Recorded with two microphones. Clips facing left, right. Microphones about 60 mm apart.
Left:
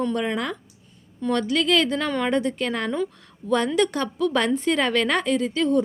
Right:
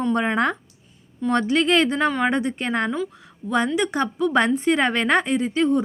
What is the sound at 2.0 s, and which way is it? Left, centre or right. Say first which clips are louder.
Speech: right 3 dB; centre.